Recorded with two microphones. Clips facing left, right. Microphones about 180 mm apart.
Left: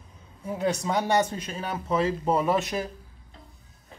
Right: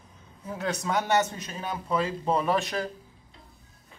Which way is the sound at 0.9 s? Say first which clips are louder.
Right 1 dB; 10° left (ahead or behind).